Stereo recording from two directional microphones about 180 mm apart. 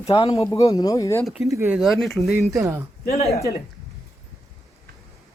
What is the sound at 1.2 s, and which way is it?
Speech, centre (ahead or behind).